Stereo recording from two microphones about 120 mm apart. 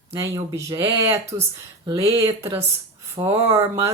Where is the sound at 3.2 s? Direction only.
45° right (ahead or behind).